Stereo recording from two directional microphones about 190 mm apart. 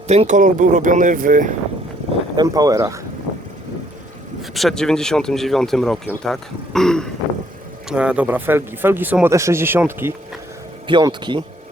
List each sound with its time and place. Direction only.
0.1 s speech: 35° right (ahead or behind)
2.3 s speech: 20° right (ahead or behind)
4.5 s speech: centre (ahead or behind)
10.8 s speech: 25° right (ahead or behind)